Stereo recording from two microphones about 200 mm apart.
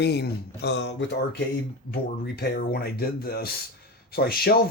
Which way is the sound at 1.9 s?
50° left (ahead or behind).